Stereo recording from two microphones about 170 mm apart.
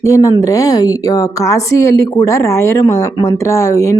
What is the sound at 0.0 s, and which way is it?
Speech, 20° left (ahead or behind).